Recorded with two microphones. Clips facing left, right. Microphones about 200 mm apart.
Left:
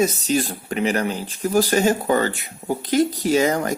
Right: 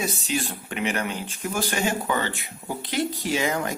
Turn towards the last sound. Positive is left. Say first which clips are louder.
# left 7 dB
turn(degrees=40)  # may be behind; listen again after turning